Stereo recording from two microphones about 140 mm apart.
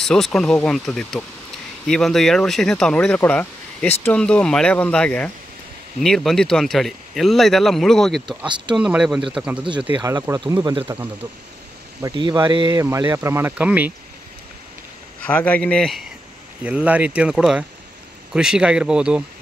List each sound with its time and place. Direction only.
0.0 s speech: 5° left (ahead or behind)
10.0 s speech: 20° right (ahead or behind)
12.0 s speech: 35° right (ahead or behind)
12.8 s speech: 20° right (ahead or behind)
15.2 s speech: 10° left (ahead or behind)
16.6 s speech: 10° right (ahead or behind)